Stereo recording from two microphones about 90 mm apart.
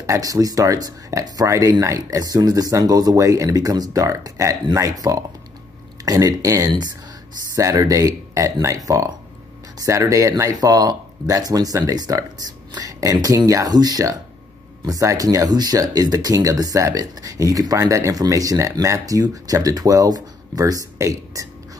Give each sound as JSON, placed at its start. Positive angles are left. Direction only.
{"t": 0.0, "sound": "speech", "side_deg": -40}